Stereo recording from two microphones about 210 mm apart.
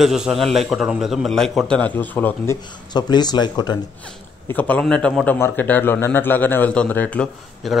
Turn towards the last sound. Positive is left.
turn(degrees=5)  # may be behind; listen again after turning